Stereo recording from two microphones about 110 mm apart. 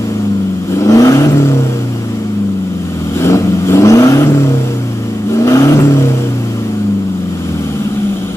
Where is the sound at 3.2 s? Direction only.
25° left (ahead or behind).